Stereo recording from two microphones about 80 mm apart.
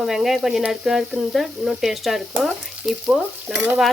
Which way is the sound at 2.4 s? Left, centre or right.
Centre.